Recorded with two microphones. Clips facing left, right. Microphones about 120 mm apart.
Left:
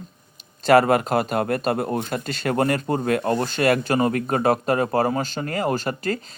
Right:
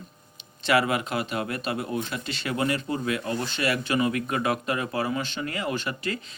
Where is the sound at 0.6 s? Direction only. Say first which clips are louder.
Left 8 dB; 45° left (ahead or behind).